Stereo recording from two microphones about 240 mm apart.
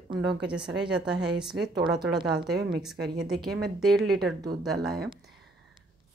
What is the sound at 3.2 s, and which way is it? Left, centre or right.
Speech, centre.